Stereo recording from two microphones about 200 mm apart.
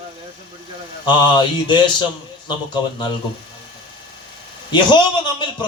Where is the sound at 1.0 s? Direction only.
20° left (ahead or behind).